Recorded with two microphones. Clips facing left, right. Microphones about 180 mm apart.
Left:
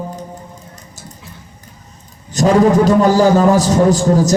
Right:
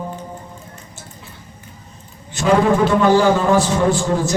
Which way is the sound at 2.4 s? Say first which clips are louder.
Left 4 dB; 40° left (ahead or behind).